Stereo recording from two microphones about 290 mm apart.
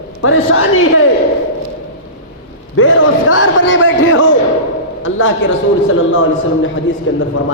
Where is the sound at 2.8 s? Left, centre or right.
Left.